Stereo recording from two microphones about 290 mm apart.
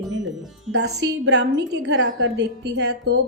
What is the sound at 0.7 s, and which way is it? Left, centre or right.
A woman's voice, right.